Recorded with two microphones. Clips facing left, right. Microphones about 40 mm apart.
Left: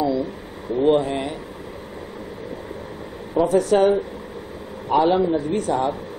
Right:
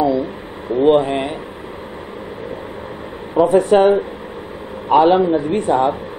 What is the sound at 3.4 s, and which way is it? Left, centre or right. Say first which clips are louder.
Speech: right 5 dB; right.